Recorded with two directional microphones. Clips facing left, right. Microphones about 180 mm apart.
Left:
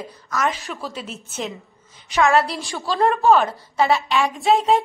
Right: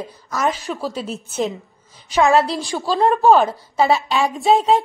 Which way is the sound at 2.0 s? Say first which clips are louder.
Right 2 dB; centre (ahead or behind).